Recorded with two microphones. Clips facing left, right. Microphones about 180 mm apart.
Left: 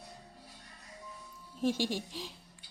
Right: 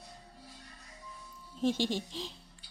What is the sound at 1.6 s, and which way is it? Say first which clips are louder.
Speech: right 1 dB; 10° left (ahead or behind).